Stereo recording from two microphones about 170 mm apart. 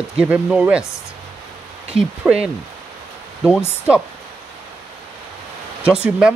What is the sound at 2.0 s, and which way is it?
Speech, 5° right (ahead or behind).